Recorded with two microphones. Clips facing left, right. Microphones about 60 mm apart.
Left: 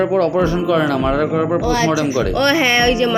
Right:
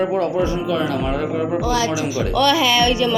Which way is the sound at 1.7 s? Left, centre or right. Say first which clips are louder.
Left 3 dB; left.